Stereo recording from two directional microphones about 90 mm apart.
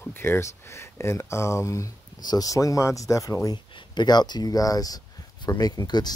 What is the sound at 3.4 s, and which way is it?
Speech, 55° left (ahead or behind).